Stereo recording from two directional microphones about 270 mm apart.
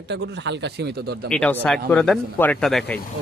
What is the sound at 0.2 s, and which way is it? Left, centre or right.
Speech, right.